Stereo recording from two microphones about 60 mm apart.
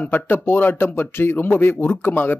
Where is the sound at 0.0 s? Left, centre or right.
Left.